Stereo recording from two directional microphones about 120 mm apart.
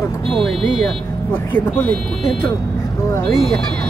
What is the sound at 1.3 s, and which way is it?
Speech, 15° left (ahead or behind).